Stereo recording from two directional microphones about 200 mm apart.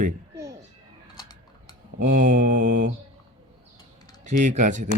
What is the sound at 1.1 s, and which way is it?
Typing, 20° left (ahead or behind).